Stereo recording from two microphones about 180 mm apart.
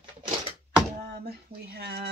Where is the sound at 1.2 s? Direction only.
60° right (ahead or behind).